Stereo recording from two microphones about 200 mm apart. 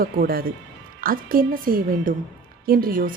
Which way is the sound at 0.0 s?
50° right (ahead or behind).